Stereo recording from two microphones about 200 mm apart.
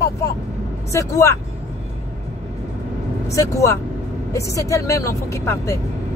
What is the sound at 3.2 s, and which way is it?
Speech, 15° left (ahead or behind).